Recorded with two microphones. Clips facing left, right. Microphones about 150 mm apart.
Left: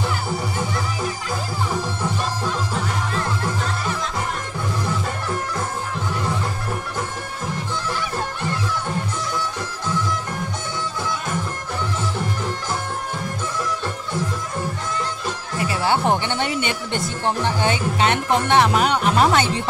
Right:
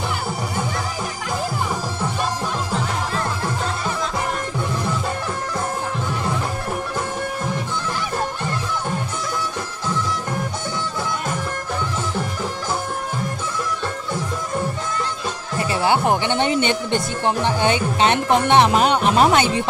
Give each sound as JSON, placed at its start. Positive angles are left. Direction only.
{"t": 15.8, "sound": "speech", "side_deg": -10}